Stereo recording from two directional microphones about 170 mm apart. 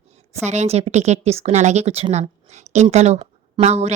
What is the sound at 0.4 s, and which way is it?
A woman's voice, 40° right (ahead or behind).